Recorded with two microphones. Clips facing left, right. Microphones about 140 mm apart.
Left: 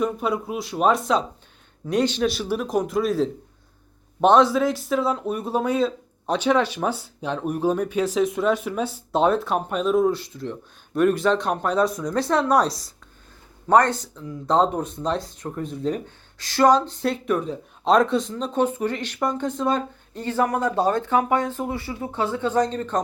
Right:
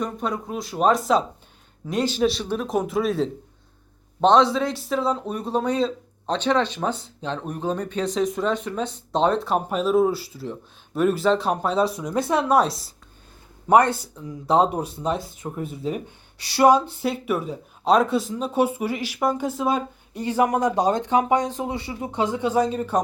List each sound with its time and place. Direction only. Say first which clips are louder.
0.0 s speech: left 3 dB; 5° left (ahead or behind)
11.7 s speech: left 3 dB; 30° right (ahead or behind)
12.3 s speech: even; 5° right (ahead or behind)